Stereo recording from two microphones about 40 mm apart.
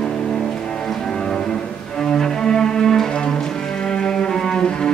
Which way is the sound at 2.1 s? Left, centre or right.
Centre.